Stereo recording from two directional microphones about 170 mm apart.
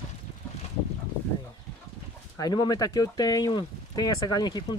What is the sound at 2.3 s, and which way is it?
Speech, 20° left (ahead or behind).